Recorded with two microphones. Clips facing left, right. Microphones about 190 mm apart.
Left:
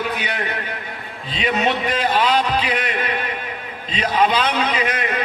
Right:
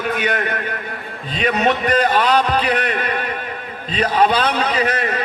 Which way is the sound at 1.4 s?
45° right (ahead or behind).